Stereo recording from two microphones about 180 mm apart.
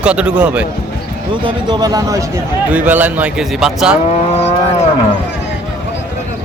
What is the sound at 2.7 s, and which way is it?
Speech, 10° right (ahead or behind).